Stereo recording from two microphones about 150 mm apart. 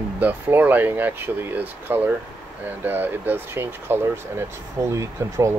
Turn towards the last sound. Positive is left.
turn(degrees=-20)  # may be behind; listen again after turning